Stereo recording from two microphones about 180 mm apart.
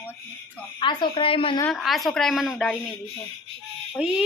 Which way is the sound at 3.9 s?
5° right (ahead or behind).